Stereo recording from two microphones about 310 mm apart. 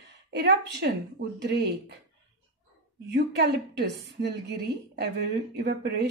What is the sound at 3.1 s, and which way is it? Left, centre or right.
A woman's voice, right.